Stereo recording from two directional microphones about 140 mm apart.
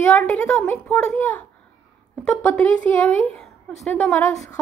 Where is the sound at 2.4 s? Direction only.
10° left (ahead or behind).